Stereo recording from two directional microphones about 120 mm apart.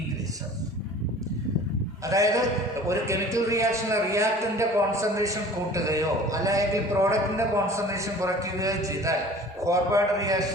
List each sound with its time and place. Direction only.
2.0 s a man's voice: 25° right (ahead or behind)